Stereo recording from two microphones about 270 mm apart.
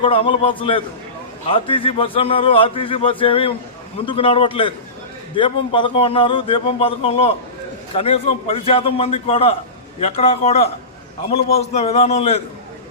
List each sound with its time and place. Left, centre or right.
0.0 s a man's voice: centre